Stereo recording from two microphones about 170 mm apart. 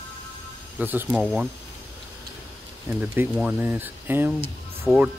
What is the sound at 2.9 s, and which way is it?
Speech, 10° right (ahead or behind).